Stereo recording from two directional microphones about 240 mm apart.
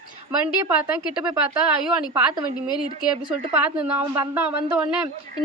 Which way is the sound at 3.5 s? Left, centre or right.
Centre.